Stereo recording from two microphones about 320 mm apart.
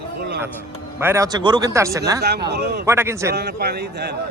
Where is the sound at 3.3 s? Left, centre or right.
Right.